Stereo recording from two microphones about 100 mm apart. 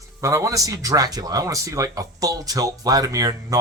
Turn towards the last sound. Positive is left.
turn(degrees=-35)  # may be behind; listen again after turning